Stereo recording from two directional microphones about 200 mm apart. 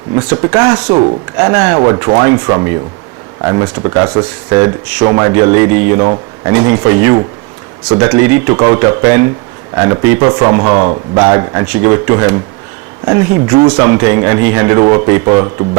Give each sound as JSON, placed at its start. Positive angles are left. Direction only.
{"t": 0.3, "sound": "speech", "side_deg": -15}
{"t": 13.6, "sound": "speech", "side_deg": -20}